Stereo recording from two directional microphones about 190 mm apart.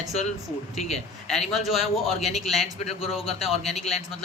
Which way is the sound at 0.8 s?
35° left (ahead or behind).